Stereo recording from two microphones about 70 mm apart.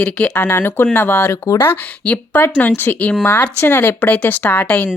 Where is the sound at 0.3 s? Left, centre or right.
Left.